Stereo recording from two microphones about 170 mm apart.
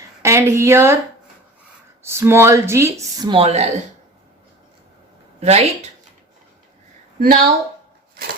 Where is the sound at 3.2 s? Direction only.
35° right (ahead or behind).